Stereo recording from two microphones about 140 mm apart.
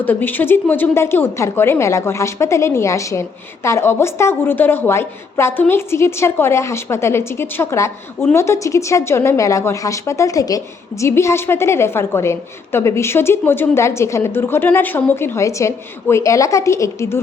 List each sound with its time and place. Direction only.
0.0 s a woman's voice: 15° left (ahead or behind)